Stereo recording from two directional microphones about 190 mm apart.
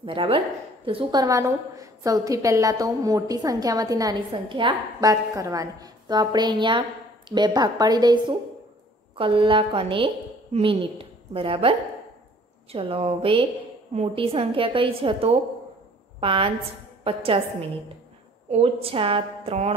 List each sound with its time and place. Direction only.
0.0 s a woman's voice: 30° right (ahead or behind)
12.7 s a woman's voice: 30° right (ahead or behind)